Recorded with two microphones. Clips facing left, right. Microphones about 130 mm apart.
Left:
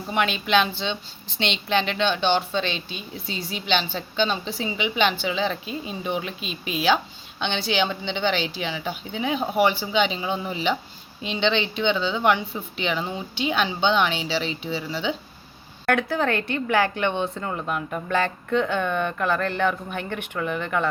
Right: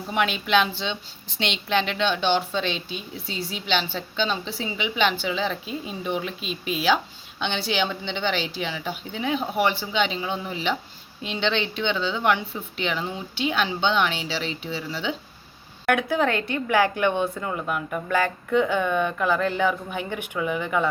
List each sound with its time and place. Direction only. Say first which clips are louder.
0.1 s speech: even; 5° right (ahead or behind)
15.9 s speech: even; 15° right (ahead or behind)